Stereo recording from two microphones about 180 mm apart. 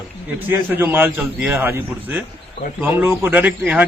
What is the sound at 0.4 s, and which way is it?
A man's voice, 10° right (ahead or behind).